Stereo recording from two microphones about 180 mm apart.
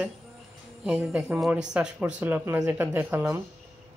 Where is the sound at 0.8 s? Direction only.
5° right (ahead or behind).